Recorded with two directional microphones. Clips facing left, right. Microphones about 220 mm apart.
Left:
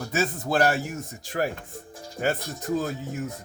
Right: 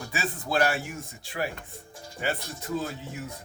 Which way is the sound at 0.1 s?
40° left (ahead or behind).